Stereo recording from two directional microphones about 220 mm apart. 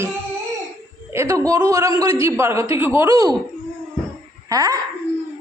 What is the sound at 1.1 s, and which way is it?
A man's voice, 15° right (ahead or behind).